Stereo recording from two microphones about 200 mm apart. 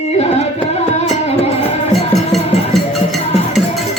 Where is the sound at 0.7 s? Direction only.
30° left (ahead or behind).